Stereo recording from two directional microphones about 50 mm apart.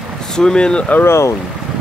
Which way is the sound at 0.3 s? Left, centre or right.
Centre.